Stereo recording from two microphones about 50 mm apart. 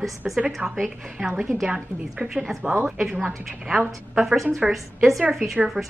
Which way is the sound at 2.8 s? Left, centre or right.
Centre.